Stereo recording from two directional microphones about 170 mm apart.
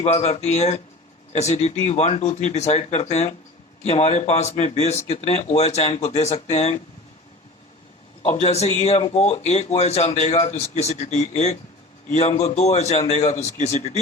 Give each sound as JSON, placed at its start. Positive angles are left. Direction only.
{"t": 0.0, "sound": "speech", "side_deg": 40}
{"t": 8.2, "sound": "speech", "side_deg": 40}